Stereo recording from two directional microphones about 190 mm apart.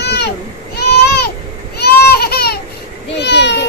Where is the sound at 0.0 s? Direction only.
60° left (ahead or behind).